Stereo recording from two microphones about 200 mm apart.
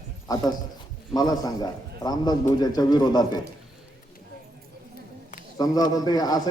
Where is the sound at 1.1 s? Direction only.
20° left (ahead or behind).